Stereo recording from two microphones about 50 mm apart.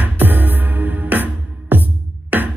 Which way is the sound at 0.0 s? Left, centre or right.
Right.